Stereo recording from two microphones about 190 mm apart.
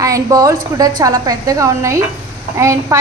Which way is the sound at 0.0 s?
20° right (ahead or behind).